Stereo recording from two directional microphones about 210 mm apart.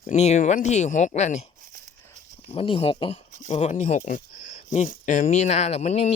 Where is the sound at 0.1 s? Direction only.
35° left (ahead or behind).